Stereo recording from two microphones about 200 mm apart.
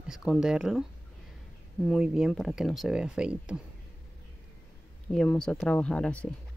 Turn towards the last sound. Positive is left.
turn(degrees=5)  # may be behind; listen again after turning